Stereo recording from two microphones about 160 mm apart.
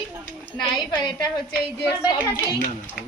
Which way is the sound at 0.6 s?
30° left (ahead or behind).